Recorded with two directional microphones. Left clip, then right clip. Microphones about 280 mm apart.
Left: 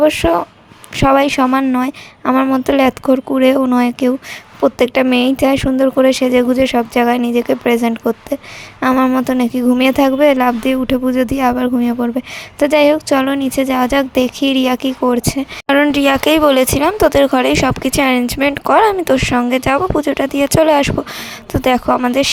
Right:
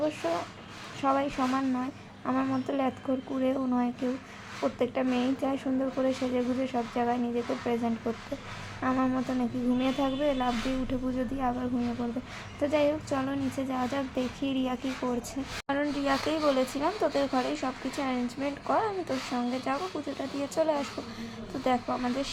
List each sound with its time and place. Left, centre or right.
0.0 s speech: left